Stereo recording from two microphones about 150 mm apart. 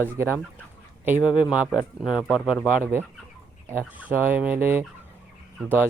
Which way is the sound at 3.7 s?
10° right (ahead or behind).